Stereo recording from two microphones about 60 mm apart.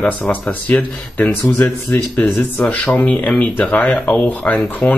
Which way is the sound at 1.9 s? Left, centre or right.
Left.